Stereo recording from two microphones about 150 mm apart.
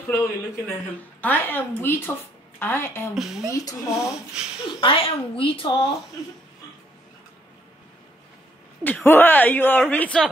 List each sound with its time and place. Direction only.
0.1 s speech: 15° left (ahead or behind)
3.2 s speech: centre (ahead or behind)
3.4 s speech: 20° left (ahead or behind)
4.7 s speech: 40° left (ahead or behind)
8.8 s speech: 10° left (ahead or behind)